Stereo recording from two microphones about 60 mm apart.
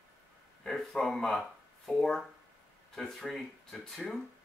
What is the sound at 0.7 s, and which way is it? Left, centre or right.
Speech, centre.